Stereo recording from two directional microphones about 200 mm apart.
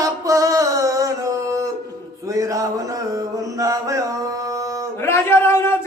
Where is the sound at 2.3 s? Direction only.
15° right (ahead or behind).